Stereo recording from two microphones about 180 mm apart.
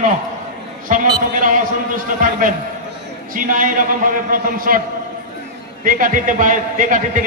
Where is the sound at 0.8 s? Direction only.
45° right (ahead or behind).